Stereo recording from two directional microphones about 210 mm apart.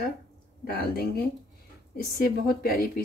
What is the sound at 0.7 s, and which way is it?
Speech, 45° left (ahead or behind).